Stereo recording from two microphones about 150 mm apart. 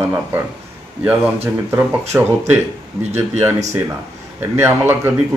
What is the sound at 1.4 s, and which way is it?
Speech, 15° right (ahead or behind).